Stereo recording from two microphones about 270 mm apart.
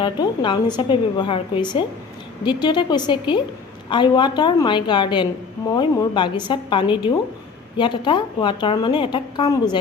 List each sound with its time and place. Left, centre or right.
0.0 s a woman's voice: centre